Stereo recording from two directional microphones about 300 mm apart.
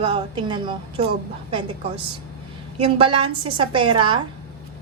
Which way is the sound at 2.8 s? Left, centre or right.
Centre.